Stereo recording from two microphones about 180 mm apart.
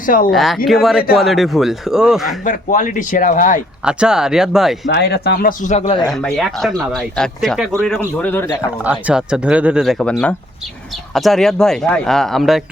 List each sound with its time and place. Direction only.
0.0 s speech: 50° left (ahead or behind)
0.3 s speech: centre (ahead or behind)
2.4 s speech: 45° left (ahead or behind)
3.8 s speech: 5° right (ahead or behind)
4.9 s speech: 70° left (ahead or behind); by 6.0 s 35° left (ahead or behind)
6.1 s speech: 5° left (ahead or behind)
8.8 s speech: 10° right (ahead or behind)